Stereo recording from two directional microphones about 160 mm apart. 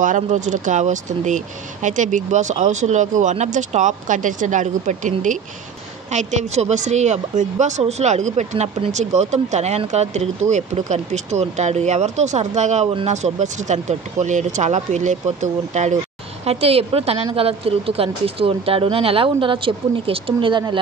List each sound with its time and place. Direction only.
0.0 s a woman's voice: 50° right (ahead or behind); by 20.8 s 30° right (ahead or behind)